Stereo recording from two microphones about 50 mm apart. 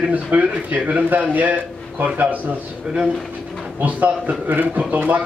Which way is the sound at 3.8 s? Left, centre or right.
Right.